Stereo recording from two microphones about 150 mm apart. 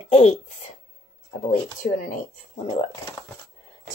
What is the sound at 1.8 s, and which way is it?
Speech, 70° left (ahead or behind).